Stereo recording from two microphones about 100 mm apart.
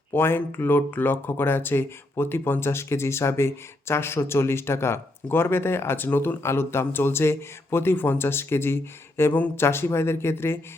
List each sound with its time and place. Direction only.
0.1 s speech: 20° left (ahead or behind)